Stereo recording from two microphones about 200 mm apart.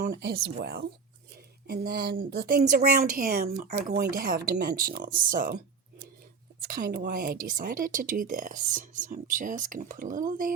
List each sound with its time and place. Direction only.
0.0 s speech: 55° right (ahead or behind)
6.6 s speech: 45° right (ahead or behind)